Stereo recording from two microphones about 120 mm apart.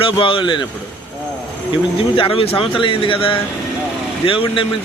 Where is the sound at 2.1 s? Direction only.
50° left (ahead or behind).